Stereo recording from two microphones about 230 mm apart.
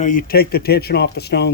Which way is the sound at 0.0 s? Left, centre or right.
Left.